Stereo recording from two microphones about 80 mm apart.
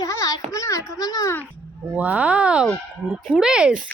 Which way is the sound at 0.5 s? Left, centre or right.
Left.